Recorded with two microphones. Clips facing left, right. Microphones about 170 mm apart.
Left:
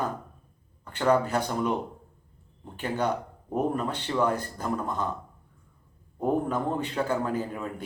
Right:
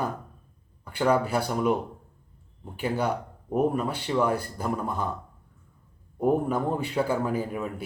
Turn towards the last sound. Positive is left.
turn(degrees=-10)  # may be behind; listen again after turning